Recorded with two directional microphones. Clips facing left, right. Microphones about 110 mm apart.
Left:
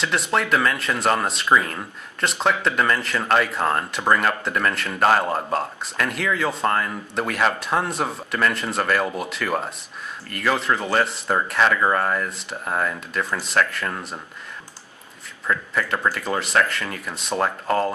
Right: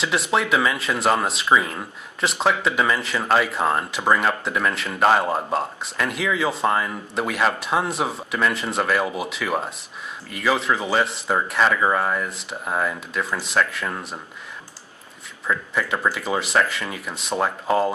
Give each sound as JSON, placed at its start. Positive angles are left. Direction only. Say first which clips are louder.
{"t": 0.0, "sound": "speech", "louder": "right 1 dB", "side_deg": 0}
{"t": 15.4, "sound": "speech", "louder": "even", "side_deg": 0}